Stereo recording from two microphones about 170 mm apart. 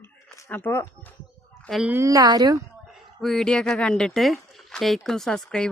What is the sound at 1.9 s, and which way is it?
Speech, 15° right (ahead or behind).